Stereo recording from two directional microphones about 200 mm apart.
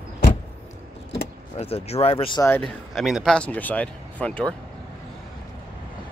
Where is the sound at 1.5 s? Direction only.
30° left (ahead or behind).